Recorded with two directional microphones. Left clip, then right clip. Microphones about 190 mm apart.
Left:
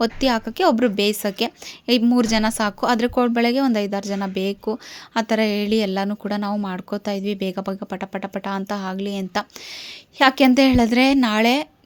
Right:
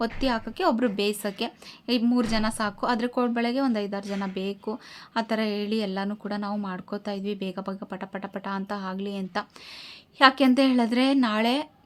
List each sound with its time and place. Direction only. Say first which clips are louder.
0.0 s a woman's voice: left 7 dB; 30° left (ahead or behind)